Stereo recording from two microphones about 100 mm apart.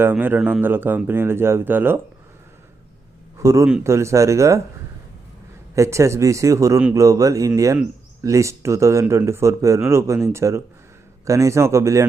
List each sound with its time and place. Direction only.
0.0 s speech: 20° right (ahead or behind)
3.3 s a man's voice: 30° right (ahead or behind)
5.7 s speech: 30° right (ahead or behind)